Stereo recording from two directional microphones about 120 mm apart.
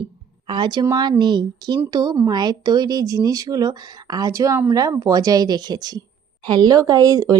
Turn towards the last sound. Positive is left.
turn(degrees=-30)  # may be behind; listen again after turning